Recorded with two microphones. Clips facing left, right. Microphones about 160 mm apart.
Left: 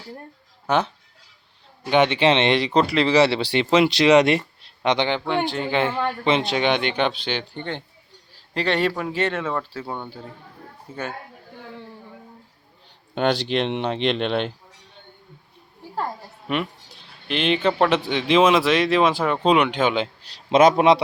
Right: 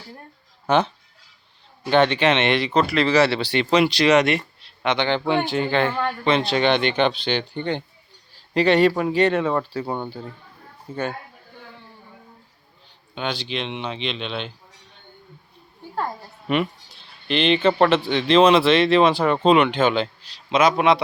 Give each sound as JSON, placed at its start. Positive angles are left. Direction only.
{"t": 1.9, "sound": "a man's voice", "side_deg": 20}
{"t": 5.5, "sound": "speech", "side_deg": 0}
{"t": 6.2, "sound": "speech", "side_deg": 20}
{"t": 10.9, "sound": "speech", "side_deg": 5}
{"t": 13.1, "sound": "speech", "side_deg": 55}
{"t": 15.8, "sound": "a sound", "side_deg": 0}
{"t": 16.9, "sound": "a man's voice", "side_deg": 5}
{"t": 20.5, "sound": "a man's voice", "side_deg": 50}
{"t": 20.7, "sound": "speech", "side_deg": 35}